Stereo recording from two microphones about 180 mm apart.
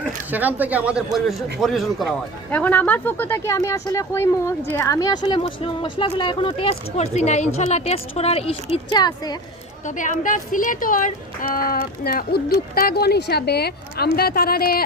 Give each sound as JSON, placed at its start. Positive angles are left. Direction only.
{"t": 0.3, "sound": "a man's voice", "side_deg": -10}
{"t": 9.8, "sound": "speech", "side_deg": 45}